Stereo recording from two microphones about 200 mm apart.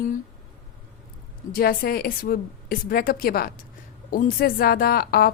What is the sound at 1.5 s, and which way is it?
A woman's voice, 50° left (ahead or behind).